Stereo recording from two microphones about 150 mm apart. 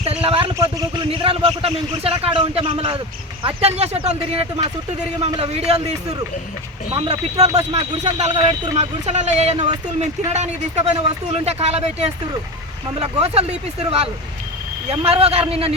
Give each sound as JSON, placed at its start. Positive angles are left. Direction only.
{"t": 0.0, "sound": "a sound", "side_deg": -40}
{"t": 0.5, "sound": "a sound", "side_deg": -20}
{"t": 1.1, "sound": "a man's voice", "side_deg": -40}
{"t": 6.9, "sound": "a man's voice", "side_deg": -35}
{"t": 7.3, "sound": "speech", "side_deg": -25}
{"t": 8.0, "sound": "speech", "side_deg": -45}
{"t": 14.8, "sound": "a man's voice", "side_deg": -40}